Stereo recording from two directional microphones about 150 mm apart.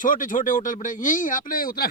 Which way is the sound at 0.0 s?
60° left (ahead or behind).